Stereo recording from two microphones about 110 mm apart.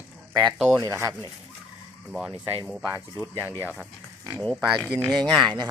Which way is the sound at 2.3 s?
45° right (ahead or behind).